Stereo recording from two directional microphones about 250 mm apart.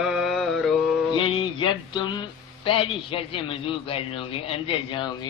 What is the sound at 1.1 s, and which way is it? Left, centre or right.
A man's voice, centre.